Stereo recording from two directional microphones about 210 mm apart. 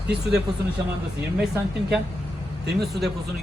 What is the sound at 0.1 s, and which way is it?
Speech, 50° right (ahead or behind).